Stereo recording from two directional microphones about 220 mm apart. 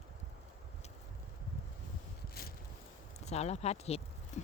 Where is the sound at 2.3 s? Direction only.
45° left (ahead or behind).